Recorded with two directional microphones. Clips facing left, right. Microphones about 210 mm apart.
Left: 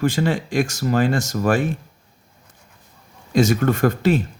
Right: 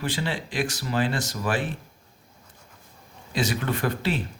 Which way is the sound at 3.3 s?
45° left (ahead or behind).